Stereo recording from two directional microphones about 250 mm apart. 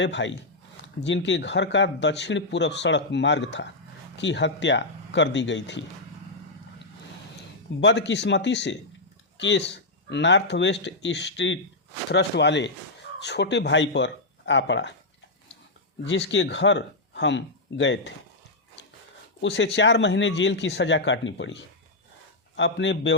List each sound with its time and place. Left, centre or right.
0.0 s speech: left
7.8 s speech: left
16.0 s speech: left
19.4 s speech: left